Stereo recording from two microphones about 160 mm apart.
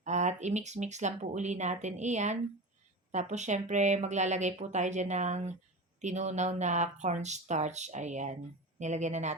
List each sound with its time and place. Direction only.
0.0 s speech: 45° right (ahead or behind)